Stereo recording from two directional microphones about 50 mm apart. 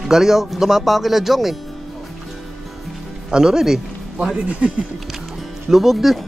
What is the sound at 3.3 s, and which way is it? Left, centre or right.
Speech, centre.